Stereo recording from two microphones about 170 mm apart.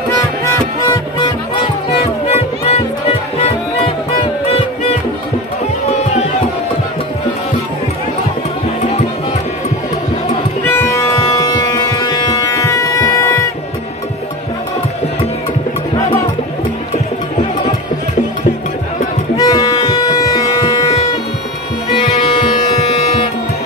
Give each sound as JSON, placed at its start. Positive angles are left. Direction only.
{"t": 0.5, "sound": "music", "side_deg": 20}
{"t": 1.9, "sound": "music", "side_deg": 35}
{"t": 10.7, "sound": "music", "side_deg": 15}
{"t": 19.3, "sound": "music", "side_deg": 20}
{"t": 21.9, "sound": "music", "side_deg": 30}